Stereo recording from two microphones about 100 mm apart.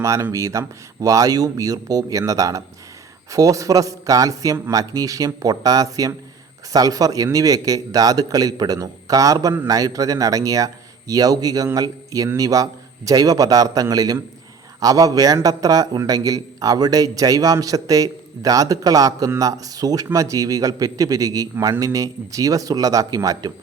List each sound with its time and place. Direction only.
0.0 s a man's voice: 30° right (ahead or behind)